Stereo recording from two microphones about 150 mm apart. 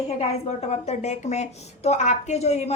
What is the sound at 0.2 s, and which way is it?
A woman's voice, 45° left (ahead or behind).